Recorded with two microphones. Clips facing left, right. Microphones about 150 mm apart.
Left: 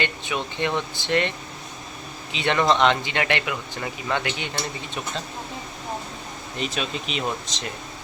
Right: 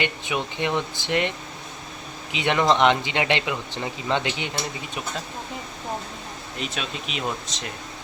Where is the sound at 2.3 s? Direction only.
15° right (ahead or behind).